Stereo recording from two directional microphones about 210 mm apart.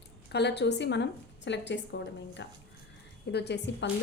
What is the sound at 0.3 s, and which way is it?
A woman's voice, 55° left (ahead or behind).